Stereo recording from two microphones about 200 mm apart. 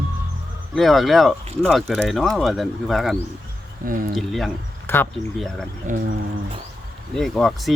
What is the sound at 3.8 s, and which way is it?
Speech, 45° right (ahead or behind).